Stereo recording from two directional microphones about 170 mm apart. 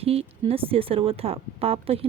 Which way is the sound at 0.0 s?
35° right (ahead or behind).